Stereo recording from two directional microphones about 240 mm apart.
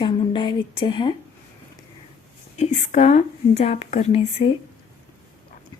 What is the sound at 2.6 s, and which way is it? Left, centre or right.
Speech, left.